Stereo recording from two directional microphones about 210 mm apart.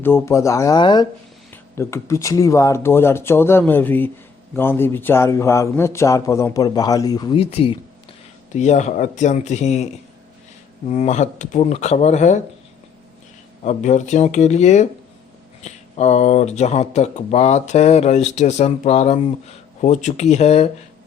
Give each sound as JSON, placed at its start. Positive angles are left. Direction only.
{"t": 0.0, "sound": "a man's voice", "side_deg": 10}
{"t": 13.6, "sound": "speech", "side_deg": 35}